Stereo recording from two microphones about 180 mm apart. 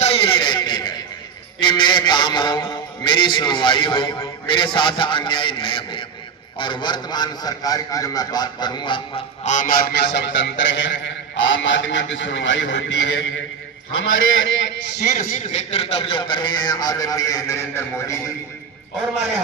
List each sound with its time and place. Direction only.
0.0 s a sound: 30° left (ahead or behind)
1.6 s a man's voice: 25° left (ahead or behind)
9.4 s a man's voice: 40° left (ahead or behind); by 15.0 s 80° left
15.1 s a man's voice: 40° left (ahead or behind); by 18.2 s 15° left (ahead or behind)